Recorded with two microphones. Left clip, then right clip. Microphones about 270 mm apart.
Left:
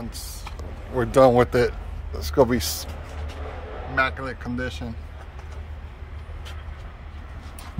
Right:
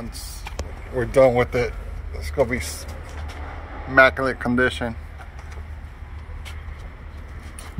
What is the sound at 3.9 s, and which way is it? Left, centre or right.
Speech, centre.